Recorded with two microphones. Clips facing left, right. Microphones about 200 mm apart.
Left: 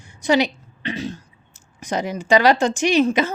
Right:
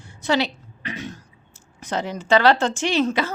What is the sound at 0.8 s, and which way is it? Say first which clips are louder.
Throat clearing: left 5 dB; 30° left (ahead or behind).